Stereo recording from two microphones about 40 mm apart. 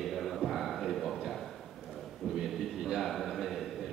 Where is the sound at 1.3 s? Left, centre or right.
Centre.